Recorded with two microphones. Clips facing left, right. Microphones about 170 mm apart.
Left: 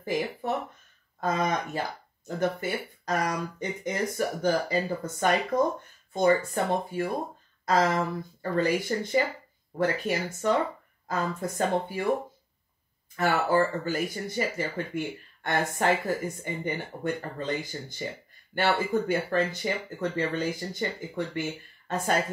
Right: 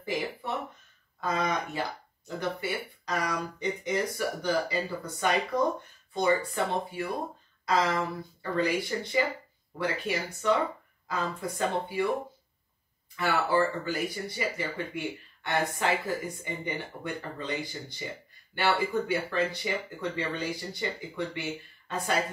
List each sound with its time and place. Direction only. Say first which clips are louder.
0.0 s speech: left 3 dB; 45° left (ahead or behind)
13.1 s speech: left 2 dB; 45° left (ahead or behind)